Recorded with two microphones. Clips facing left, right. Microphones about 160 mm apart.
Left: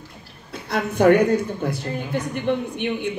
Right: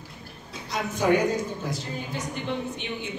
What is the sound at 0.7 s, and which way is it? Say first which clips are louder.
Speech: left 7 dB; 60° left (ahead or behind).